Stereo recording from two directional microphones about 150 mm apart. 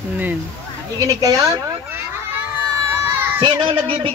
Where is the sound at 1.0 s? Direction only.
25° right (ahead or behind).